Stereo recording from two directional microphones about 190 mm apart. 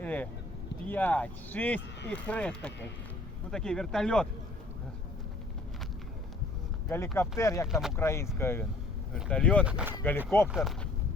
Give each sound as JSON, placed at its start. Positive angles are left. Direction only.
{"t": 0.0, "sound": "speech", "side_deg": 10}
{"t": 7.2, "sound": "speech", "side_deg": 15}
{"t": 7.7, "sound": "speech", "side_deg": 0}
{"t": 7.9, "sound": "speech", "side_deg": 15}
{"t": 9.6, "sound": "speech", "side_deg": -5}
{"t": 10.0, "sound": "speech", "side_deg": 10}
{"t": 10.5, "sound": "speech", "side_deg": 0}